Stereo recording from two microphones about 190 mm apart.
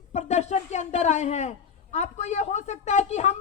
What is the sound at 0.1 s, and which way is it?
A woman's voice, 35° left (ahead or behind).